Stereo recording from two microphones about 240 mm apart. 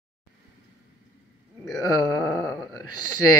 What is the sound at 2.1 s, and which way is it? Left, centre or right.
Speech, centre.